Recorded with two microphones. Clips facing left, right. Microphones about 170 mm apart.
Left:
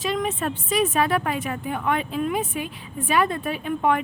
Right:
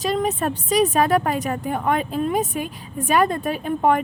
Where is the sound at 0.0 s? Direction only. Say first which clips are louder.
Right 3 dB; 40° right (ahead or behind).